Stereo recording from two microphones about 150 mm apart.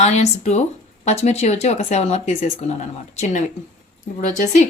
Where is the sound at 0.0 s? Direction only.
50° left (ahead or behind).